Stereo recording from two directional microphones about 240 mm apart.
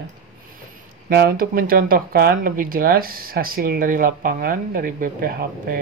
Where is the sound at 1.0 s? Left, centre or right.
Right.